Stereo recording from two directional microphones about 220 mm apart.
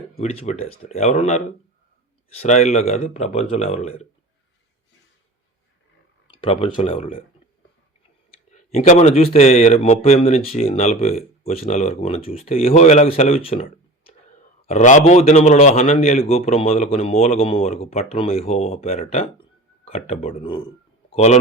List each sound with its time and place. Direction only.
0.2 s a man's voice: 30° left (ahead or behind)
6.2 s speech: 25° left (ahead or behind)
8.5 s a man's voice: 30° left (ahead or behind)
14.7 s a man's voice: 35° left (ahead or behind)